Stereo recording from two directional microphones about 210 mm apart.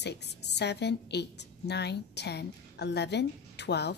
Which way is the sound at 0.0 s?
55° left (ahead or behind).